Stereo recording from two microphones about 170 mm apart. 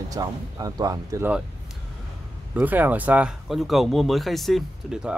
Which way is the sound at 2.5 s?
10° right (ahead or behind).